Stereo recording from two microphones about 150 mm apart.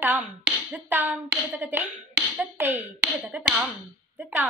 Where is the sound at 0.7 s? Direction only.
10° right (ahead or behind).